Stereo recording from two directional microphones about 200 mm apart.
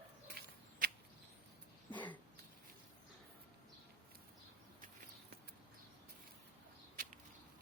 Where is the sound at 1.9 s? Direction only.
10° left (ahead or behind).